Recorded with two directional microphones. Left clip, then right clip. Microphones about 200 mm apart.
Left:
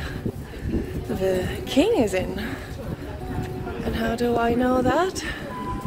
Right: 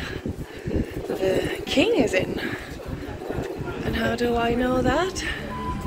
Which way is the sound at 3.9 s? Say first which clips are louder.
Even; 20° left (ahead or behind).